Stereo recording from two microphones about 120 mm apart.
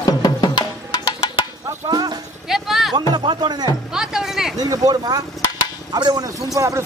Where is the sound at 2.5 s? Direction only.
Centre (ahead or behind).